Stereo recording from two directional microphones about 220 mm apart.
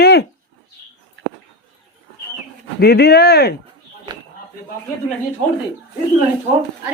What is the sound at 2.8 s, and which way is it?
Speech, 45° left (ahead or behind).